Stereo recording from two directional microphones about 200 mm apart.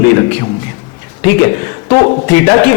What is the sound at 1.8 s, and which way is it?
Speech, 20° left (ahead or behind).